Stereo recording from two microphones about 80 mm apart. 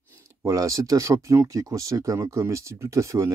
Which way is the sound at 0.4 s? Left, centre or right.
Right.